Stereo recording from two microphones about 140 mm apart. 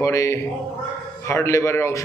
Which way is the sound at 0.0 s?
20° left (ahead or behind).